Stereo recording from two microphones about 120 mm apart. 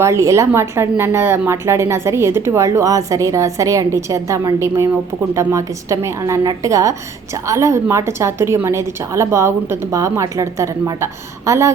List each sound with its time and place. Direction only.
0.0 s a woman's voice: 25° right (ahead or behind)